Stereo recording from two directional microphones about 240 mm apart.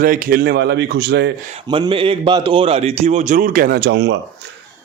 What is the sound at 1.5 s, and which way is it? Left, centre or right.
A man's voice, right.